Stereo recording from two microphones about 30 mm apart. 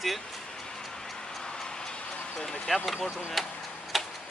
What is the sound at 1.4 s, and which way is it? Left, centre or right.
Tick-tock, left.